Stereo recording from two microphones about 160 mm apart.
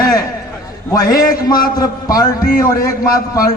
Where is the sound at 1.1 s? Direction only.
65° left (ahead or behind).